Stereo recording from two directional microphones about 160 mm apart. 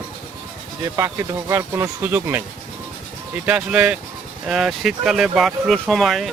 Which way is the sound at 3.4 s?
5° right (ahead or behind).